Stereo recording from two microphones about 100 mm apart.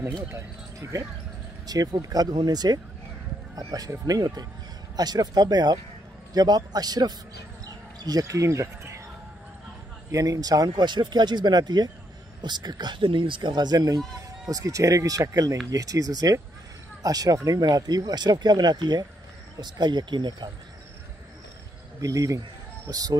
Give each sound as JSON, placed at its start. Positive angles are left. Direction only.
{"t": 0.3, "sound": "speech", "side_deg": -30}
{"t": 10.1, "sound": "speech", "side_deg": -35}
{"t": 22.0, "sound": "speech", "side_deg": -35}